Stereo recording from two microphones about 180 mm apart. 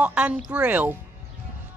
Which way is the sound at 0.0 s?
5° right (ahead or behind).